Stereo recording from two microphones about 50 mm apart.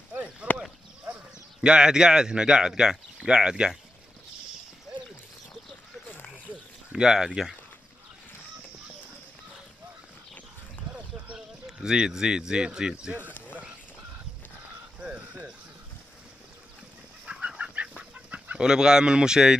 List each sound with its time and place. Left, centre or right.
0.4 s a sound: right
1.1 s speech: centre
6.3 s a sound: centre
11.3 s speech: centre
15.0 s frog: right
17.3 s chicken: right
18.6 s speech: centre